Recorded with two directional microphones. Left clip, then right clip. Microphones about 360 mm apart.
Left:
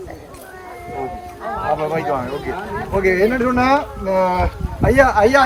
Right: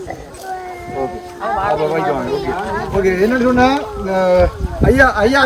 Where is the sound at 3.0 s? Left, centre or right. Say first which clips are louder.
Right 1 dB; centre.